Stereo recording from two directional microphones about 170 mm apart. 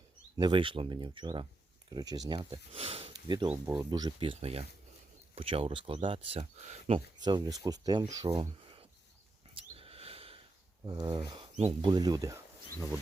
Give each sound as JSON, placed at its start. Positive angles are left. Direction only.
{"t": 0.3, "sound": "speech", "side_deg": -30}
{"t": 7.3, "sound": "speech", "side_deg": -25}
{"t": 8.4, "sound": "a sound", "side_deg": -30}
{"t": 9.6, "sound": "mouse", "side_deg": -35}
{"t": 10.8, "sound": "speech", "side_deg": -25}
{"t": 11.5, "sound": "speech", "side_deg": -35}
{"t": 11.9, "sound": "speech", "side_deg": -20}